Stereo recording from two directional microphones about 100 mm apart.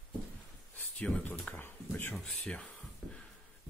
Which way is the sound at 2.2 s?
5° left (ahead or behind).